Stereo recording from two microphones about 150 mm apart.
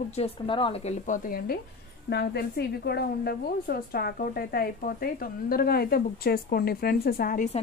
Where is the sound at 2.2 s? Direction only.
90° left.